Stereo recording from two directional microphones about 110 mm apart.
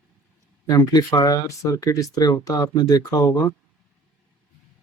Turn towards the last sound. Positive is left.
turn(degrees=35)  # may be behind; listen again after turning